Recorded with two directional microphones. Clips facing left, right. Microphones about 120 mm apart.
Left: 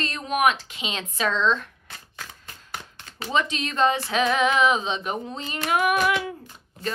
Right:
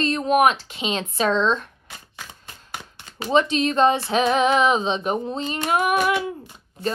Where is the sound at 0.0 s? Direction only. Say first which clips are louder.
Right 5 dB; 35° right (ahead or behind).